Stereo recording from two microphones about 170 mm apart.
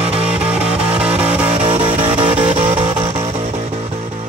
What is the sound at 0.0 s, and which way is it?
Music, 35° right (ahead or behind).